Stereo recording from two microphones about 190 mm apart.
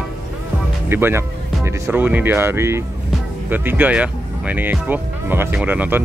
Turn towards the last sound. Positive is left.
turn(degrees=-10)  # may be behind; listen again after turning